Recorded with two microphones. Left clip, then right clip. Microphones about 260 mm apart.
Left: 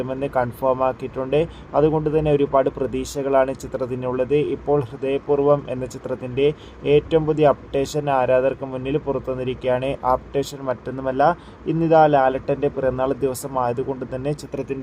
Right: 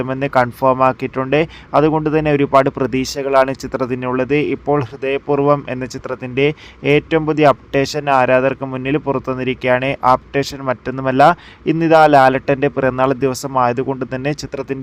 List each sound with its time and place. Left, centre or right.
0.3 s speech: right
2.9 s speech: right
3.2 s speech: right
14.5 s speech: right